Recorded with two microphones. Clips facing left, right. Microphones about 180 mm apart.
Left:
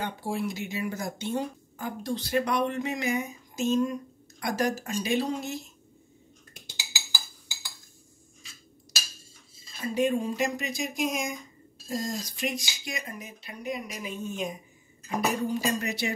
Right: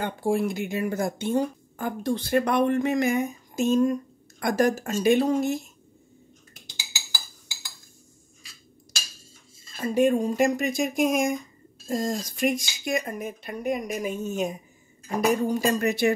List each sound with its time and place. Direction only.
0.0 s speech: 50° right (ahead or behind)
9.8 s speech: 50° right (ahead or behind)